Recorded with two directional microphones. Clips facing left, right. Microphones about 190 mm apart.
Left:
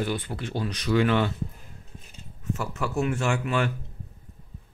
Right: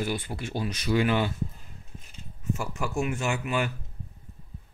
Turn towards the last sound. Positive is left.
turn(degrees=-5)  # may be behind; listen again after turning